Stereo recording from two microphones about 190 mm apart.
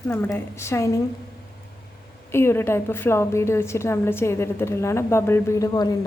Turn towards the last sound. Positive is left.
turn(degrees=20)  # may be behind; listen again after turning